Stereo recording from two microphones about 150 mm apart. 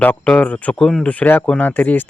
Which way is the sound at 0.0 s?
10° left (ahead or behind).